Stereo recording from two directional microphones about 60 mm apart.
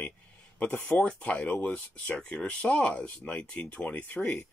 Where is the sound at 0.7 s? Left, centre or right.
Left.